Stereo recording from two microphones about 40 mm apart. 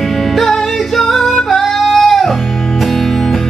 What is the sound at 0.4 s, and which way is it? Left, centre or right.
Music, centre.